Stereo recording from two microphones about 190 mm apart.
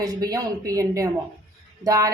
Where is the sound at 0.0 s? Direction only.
20° right (ahead or behind).